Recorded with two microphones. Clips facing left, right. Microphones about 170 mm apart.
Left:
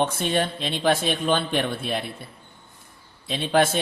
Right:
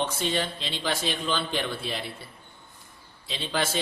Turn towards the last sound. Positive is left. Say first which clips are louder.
# left 9 dB
turn(degrees=55)  # may be behind; listen again after turning